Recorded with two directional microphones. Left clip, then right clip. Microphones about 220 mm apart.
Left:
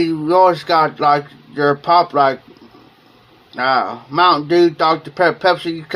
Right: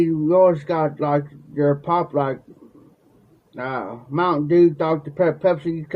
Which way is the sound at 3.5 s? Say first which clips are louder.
Left 11 dB; 5° left (ahead or behind).